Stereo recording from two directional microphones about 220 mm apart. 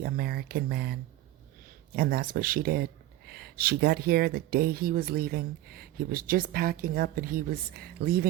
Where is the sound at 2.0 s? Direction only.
45° right (ahead or behind).